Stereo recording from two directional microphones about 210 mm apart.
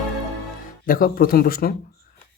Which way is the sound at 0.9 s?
45° left (ahead or behind).